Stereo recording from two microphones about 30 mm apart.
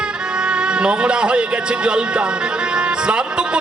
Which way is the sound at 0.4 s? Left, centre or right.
Right.